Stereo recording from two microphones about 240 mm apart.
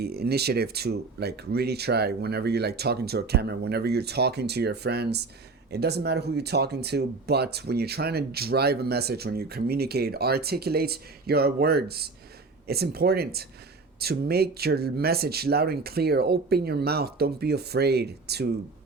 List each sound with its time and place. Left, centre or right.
0.0 s speech: right